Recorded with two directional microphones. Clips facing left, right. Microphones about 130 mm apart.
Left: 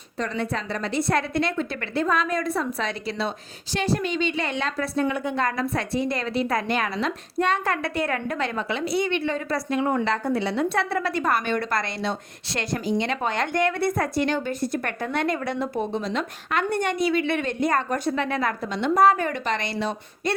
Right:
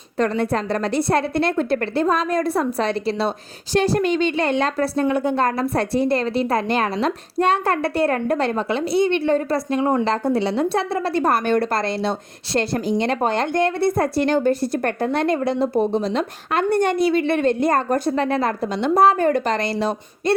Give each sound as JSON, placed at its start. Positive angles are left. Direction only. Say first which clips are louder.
{"t": 0.3, "sound": "a woman's voice", "louder": "right 7 dB", "side_deg": -45}
{"t": 1.0, "sound": "a woman's voice", "louder": "right 4 dB", "side_deg": -35}
{"t": 1.5, "sound": "a woman's voice", "louder": "right 7 dB", "side_deg": -55}
{"t": 1.8, "sound": "a woman's voice", "louder": "right 4 dB", "side_deg": -35}